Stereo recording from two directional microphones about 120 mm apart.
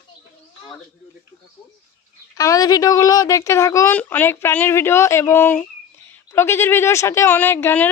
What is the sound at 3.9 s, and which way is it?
Speech, 15° left (ahead or behind).